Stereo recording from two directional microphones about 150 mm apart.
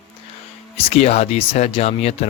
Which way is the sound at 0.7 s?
40° left (ahead or behind).